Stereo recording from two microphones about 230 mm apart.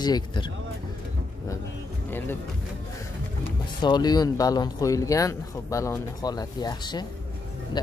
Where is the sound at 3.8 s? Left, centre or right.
Centre.